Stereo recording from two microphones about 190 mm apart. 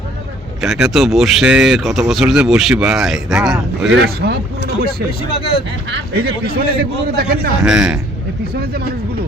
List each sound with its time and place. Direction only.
0.6 s speech: centre (ahead or behind)
3.9 s speech: 60° right (ahead or behind)
5.3 s speech: 30° left (ahead or behind)
5.9 s a man's voice: 60° right (ahead or behind)
7.6 s speech: 5° right (ahead or behind)